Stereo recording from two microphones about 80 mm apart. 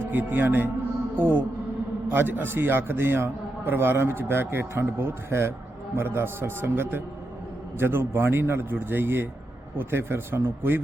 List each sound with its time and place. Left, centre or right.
0.0 s a man's voice: right